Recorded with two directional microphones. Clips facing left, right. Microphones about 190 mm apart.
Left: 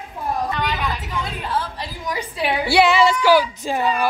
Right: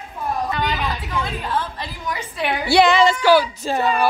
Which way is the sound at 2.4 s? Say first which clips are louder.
Right 1 dB; 10° left (ahead or behind).